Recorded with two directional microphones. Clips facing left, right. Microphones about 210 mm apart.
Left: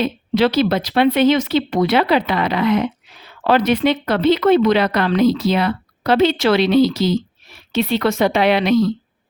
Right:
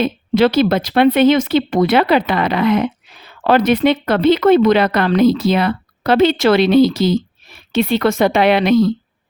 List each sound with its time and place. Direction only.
0.0 s speech: 50° right (ahead or behind)